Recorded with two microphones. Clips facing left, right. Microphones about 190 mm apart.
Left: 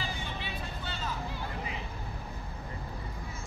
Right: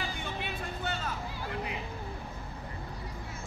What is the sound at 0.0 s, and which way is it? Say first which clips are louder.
Music: right 2 dB; 55° right (ahead or behind).